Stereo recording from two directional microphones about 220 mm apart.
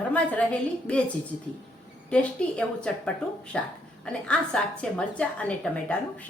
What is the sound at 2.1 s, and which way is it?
A woman's voice, 5° left (ahead or behind).